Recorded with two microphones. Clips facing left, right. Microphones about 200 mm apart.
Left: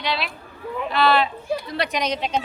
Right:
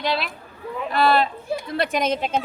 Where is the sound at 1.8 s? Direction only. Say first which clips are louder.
Right 5 dB; 50° right (ahead or behind).